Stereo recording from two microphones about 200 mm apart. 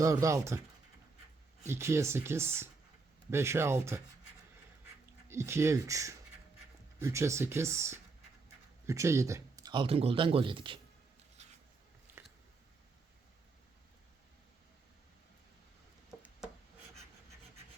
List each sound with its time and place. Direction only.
0.0 s speech: 15° right (ahead or behind)
1.6 s speech: 15° right (ahead or behind)
5.3 s speech: 15° right (ahead or behind)
12.1 s biting: 10° right (ahead or behind)